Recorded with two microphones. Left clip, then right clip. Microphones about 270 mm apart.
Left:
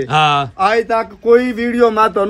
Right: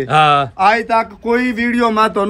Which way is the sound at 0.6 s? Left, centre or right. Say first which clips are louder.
Right 1 dB; right.